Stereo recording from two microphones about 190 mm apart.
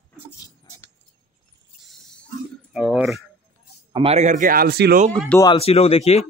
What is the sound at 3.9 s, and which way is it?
Speech, 30° right (ahead or behind).